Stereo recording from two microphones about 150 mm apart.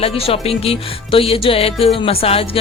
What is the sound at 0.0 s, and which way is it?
Music, 40° left (ahead or behind).